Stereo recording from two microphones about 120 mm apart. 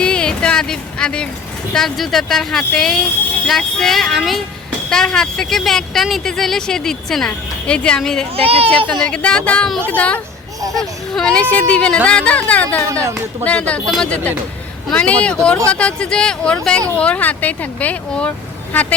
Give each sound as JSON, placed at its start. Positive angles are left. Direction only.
{"t": 0.0, "sound": "a sound", "side_deg": 10}
{"t": 1.7, "sound": "a woman's voice", "side_deg": 0}
{"t": 8.4, "sound": "speech", "side_deg": -55}
{"t": 9.0, "sound": "a woman's voice", "side_deg": 10}
{"t": 12.9, "sound": "speech", "side_deg": -25}
{"t": 13.4, "sound": "speech", "side_deg": 10}